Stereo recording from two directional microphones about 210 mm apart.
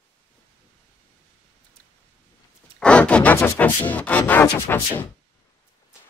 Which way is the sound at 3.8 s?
5° left (ahead or behind).